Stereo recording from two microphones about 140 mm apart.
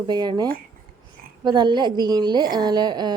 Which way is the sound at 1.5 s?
30° right (ahead or behind).